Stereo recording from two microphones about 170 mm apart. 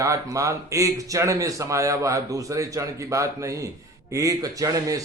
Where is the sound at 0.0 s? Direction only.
20° right (ahead or behind).